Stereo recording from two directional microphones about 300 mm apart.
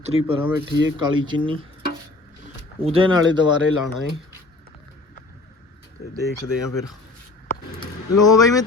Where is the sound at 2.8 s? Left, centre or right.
Centre.